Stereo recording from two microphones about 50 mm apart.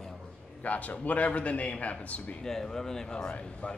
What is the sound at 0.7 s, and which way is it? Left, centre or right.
A man's voice, left.